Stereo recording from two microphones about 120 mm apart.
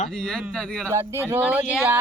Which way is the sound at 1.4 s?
10° right (ahead or behind).